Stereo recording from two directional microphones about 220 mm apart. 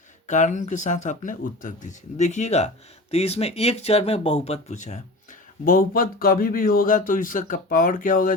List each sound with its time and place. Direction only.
0.3 s speech: 35° left (ahead or behind)